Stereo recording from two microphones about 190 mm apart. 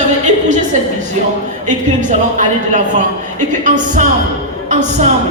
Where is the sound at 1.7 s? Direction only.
40° right (ahead or behind).